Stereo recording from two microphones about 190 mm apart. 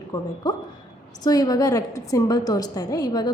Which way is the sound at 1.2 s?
20° left (ahead or behind).